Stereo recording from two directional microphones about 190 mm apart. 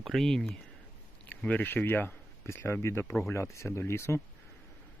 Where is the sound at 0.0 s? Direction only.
Centre (ahead or behind).